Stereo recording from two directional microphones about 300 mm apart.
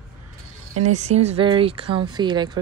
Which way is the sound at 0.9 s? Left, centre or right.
Right.